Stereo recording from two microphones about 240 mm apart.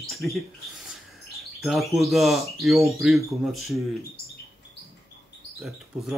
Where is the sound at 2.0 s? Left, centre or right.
Centre.